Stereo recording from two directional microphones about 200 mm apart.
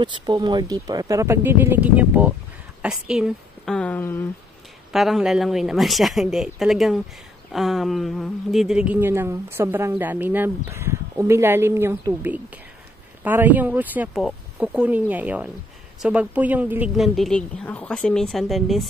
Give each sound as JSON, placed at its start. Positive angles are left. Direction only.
{"t": 0.0, "sound": "a woman's voice", "side_deg": -20}
{"t": 4.9, "sound": "a woman's voice", "side_deg": 0}